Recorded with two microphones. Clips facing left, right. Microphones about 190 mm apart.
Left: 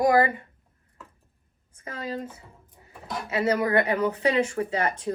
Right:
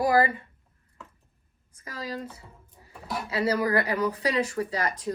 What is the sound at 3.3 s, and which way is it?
Speech, 25° left (ahead or behind).